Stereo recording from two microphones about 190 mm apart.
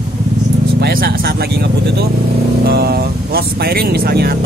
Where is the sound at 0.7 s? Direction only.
55° right (ahead or behind).